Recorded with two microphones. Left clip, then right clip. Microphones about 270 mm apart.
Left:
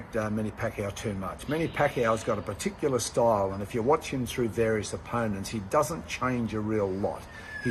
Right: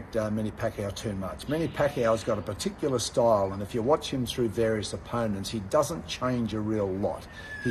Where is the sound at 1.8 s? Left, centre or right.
Centre.